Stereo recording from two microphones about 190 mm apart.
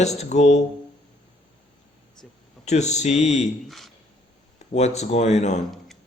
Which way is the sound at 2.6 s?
35° left (ahead or behind).